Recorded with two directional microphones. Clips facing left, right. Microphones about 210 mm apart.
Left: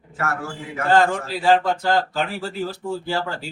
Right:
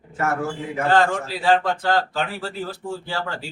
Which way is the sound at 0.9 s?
Centre (ahead or behind).